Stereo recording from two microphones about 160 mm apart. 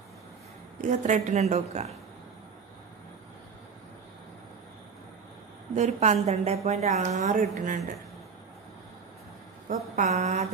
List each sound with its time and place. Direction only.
0.7 s a woman's voice: 50° right (ahead or behind)
5.8 s a woman's voice: 45° right (ahead or behind)
9.9 s a woman's voice: 45° right (ahead or behind)